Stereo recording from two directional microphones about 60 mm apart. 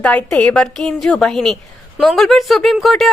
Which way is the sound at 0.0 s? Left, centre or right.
Left.